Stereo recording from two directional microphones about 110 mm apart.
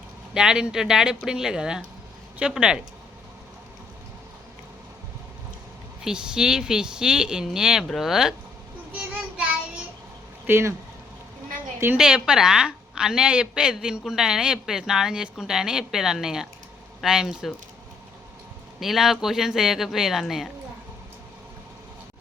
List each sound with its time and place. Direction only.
0.3 s speech: 5° right (ahead or behind)
6.0 s a woman's voice: 5° right (ahead or behind)
10.4 s speech: 20° right (ahead or behind)
11.9 s a woman's voice: 5° right (ahead or behind)
18.8 s a woman's voice: 5° right (ahead or behind)